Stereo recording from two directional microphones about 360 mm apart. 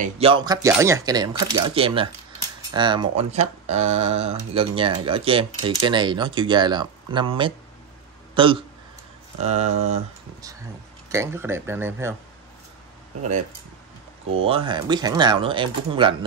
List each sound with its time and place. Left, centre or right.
0.0 s speech: centre
11.1 s speech: centre
14.3 s speech: centre